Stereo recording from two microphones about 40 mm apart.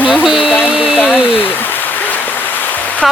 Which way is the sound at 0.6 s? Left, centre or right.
Right.